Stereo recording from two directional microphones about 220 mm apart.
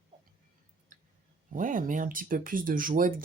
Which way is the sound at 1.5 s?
35° right (ahead or behind).